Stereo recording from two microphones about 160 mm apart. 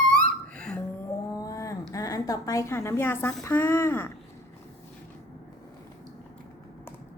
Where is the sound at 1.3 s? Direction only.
20° left (ahead or behind).